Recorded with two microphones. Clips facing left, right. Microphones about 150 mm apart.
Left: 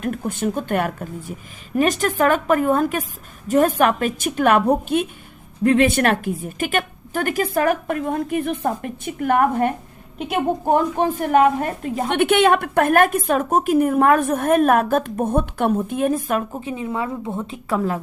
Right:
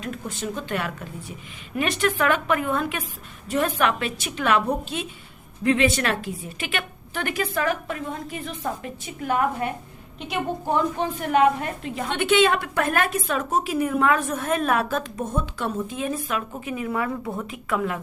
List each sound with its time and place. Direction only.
0.0 s a woman's voice: 55° left (ahead or behind)
16.5 s a woman's voice: 30° left (ahead or behind)